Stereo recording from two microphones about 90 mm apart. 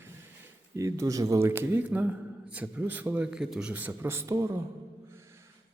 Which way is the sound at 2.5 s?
20° right (ahead or behind).